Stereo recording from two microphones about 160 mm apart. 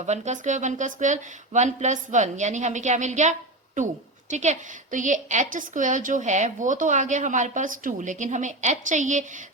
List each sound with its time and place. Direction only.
0.0 s a woman's voice: 50° right (ahead or behind)